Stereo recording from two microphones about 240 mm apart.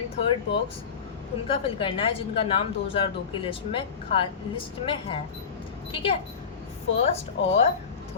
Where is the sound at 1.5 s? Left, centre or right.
Left.